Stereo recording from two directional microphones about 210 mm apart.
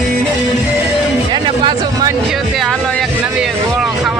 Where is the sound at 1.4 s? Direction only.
20° right (ahead or behind).